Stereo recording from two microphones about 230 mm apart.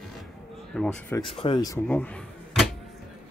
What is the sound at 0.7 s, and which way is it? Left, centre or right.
Speech, centre.